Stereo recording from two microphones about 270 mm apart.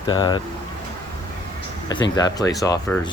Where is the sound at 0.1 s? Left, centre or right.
Centre.